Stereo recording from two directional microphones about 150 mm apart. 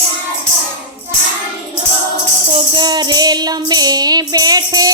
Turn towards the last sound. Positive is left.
turn(degrees=-25)  # may be behind; listen again after turning